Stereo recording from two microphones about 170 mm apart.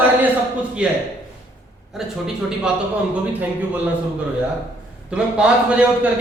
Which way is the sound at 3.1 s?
10° right (ahead or behind).